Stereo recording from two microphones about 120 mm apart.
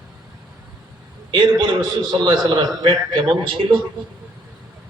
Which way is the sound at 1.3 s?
35° right (ahead or behind).